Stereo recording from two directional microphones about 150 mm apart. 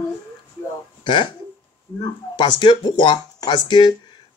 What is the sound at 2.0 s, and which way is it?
Speech, 30° left (ahead or behind).